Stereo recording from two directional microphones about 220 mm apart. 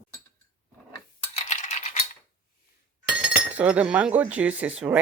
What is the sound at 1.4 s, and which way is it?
Rattle, 30° left (ahead or behind).